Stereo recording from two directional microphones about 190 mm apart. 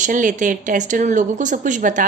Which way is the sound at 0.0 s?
45° right (ahead or behind).